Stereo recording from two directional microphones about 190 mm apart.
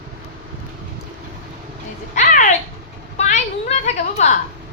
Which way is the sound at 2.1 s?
40° left (ahead or behind).